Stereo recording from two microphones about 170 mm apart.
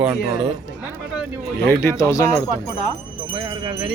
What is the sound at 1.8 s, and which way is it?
Speech, 20° left (ahead or behind).